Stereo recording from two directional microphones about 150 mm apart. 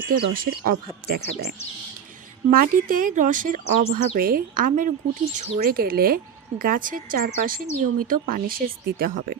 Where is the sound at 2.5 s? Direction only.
70° right (ahead or behind).